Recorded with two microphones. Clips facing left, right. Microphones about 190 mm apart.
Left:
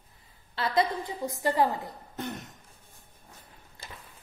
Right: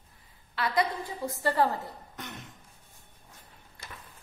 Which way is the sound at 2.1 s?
35° left (ahead or behind).